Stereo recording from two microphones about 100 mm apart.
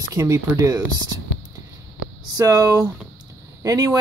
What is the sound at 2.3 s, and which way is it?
Speech, 35° right (ahead or behind).